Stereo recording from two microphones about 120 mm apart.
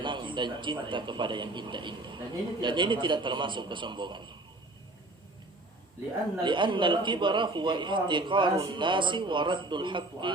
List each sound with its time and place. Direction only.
0.0 s a man's voice: 45° right (ahead or behind)
6.4 s a man's voice: 40° right (ahead or behind)